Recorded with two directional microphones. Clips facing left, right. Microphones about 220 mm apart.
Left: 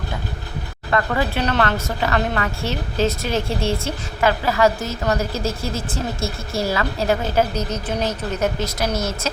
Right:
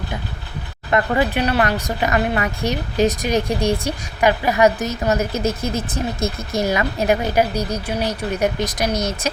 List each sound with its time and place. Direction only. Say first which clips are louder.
0.9 s a woman's voice: right 3 dB; 20° right (ahead or behind)